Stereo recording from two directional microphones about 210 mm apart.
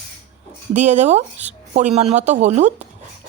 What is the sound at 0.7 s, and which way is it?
Speech, 35° right (ahead or behind).